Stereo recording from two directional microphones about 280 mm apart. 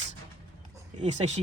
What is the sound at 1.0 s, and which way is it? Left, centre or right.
Speech, right.